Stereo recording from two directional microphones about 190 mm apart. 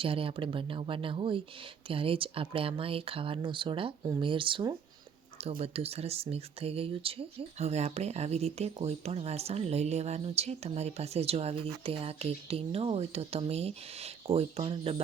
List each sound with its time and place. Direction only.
0.0 s speech: 30° right (ahead or behind)